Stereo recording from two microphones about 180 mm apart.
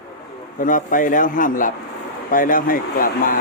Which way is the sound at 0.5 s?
50° left (ahead or behind).